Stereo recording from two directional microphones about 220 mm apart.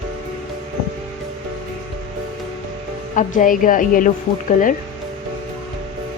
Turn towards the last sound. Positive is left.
turn(degrees=35)  # may be behind; listen again after turning